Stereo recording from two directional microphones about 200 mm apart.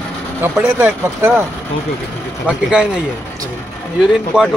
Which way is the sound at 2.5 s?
5° right (ahead or behind).